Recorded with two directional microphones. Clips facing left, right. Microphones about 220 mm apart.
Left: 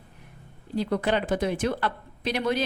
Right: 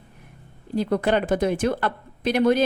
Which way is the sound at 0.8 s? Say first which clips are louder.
Right 4 dB; 50° right (ahead or behind).